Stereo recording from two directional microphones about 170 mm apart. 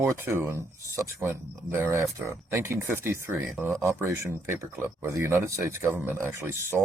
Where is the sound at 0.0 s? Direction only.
15° right (ahead or behind).